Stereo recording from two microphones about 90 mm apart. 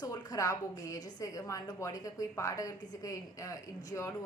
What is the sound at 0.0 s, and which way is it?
A woman's voice, 40° left (ahead or behind).